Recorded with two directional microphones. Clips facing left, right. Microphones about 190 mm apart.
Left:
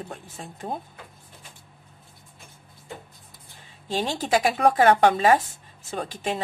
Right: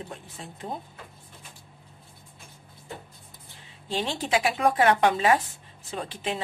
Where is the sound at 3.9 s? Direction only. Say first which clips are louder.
Left 3 dB; 45° left (ahead or behind).